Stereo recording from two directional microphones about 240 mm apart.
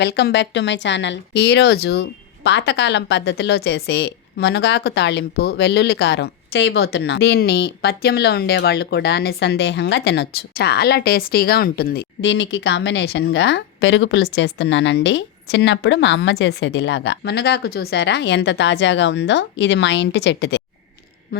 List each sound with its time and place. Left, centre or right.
0.0 s speech: left